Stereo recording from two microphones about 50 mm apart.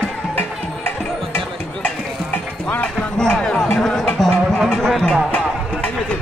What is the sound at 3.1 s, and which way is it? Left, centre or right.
Music, centre.